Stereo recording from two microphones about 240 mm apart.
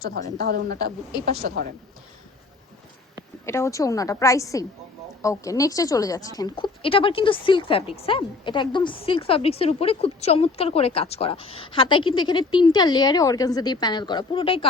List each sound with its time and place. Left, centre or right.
0.0 s a woman's voice: right
3.4 s a woman's voice: centre